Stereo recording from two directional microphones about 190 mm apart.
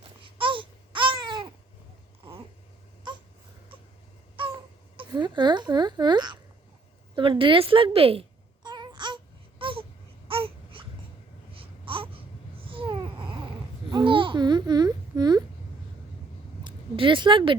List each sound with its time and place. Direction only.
0.3 s babbling: 25° right (ahead or behind)
4.9 s speech: 25° right (ahead or behind)
7.2 s cat: 25° right (ahead or behind)
10.2 s baby cry: 30° right (ahead or behind)
11.5 s babbling: 30° right (ahead or behind)
16.6 s a sound: 25° right (ahead or behind)